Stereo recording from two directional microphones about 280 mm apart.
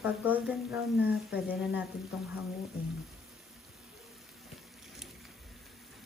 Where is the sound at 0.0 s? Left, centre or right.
Centre.